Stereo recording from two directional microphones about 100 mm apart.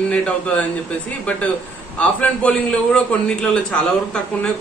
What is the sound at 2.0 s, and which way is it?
A man's voice, 15° left (ahead or behind).